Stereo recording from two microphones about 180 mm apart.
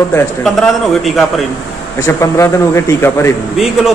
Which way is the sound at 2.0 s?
15° left (ahead or behind).